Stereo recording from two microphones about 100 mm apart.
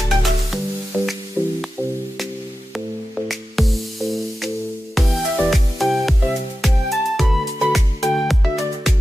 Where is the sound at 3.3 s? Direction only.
Centre (ahead or behind).